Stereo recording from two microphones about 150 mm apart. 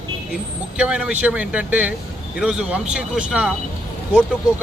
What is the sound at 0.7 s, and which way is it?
A man's voice, 5° right (ahead or behind).